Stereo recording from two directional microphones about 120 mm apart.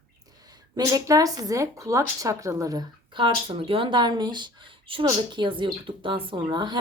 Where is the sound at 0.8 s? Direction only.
30° right (ahead or behind).